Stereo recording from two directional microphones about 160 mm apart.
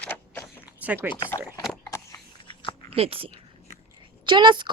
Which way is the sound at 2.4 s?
30° left (ahead or behind).